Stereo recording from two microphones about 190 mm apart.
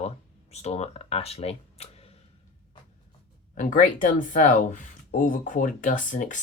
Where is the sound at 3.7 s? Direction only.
45° left (ahead or behind).